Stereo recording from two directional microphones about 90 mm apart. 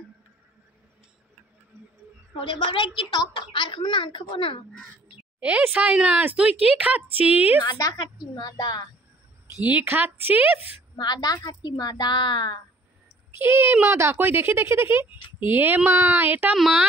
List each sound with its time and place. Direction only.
2.5 s a woman's voice: 70° left (ahead or behind)
5.4 s speech: 15° right (ahead or behind)
7.7 s a woman's voice: 45° left (ahead or behind)
9.7 s speech: 20° right (ahead or behind)
11.0 s a woman's voice: 50° left (ahead or behind)
13.4 s speech: 25° right (ahead or behind)
16.5 s speech: centre (ahead or behind)